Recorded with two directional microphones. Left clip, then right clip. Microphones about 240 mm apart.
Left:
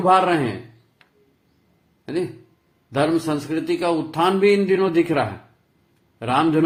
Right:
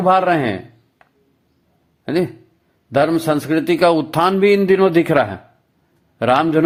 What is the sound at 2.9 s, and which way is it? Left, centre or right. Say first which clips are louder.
A man's voice: right 5 dB; right.